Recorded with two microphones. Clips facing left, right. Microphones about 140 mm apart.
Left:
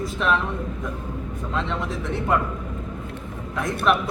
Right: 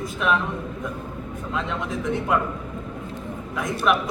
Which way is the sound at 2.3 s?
Centre (ahead or behind).